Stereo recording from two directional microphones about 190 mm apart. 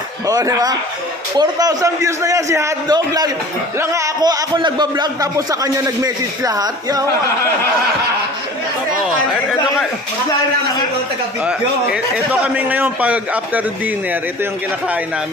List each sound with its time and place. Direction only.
0.3 s a man's voice: 15° right (ahead or behind)
9.0 s speech: centre (ahead or behind)
11.4 s a man's voice: 5° right (ahead or behind)